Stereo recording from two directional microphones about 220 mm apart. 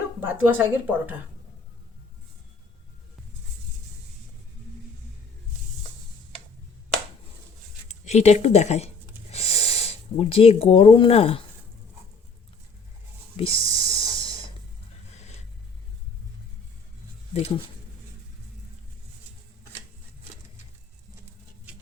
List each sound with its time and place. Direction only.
0.2 s speech: 10° right (ahead or behind)
7.9 s speech: 30° left (ahead or behind)
13.3 s a sound: 25° left (ahead or behind)